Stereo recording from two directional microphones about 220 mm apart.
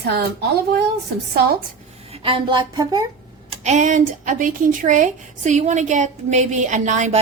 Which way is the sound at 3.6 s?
30° right (ahead or behind).